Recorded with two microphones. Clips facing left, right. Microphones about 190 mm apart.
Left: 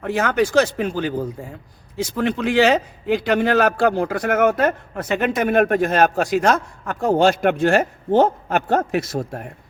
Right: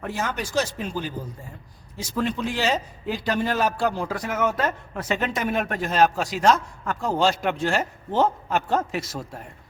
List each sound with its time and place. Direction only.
0.1 s a man's voice: 70° left (ahead or behind)